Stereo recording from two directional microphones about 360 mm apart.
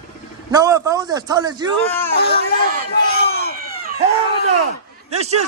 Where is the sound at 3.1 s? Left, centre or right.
Left.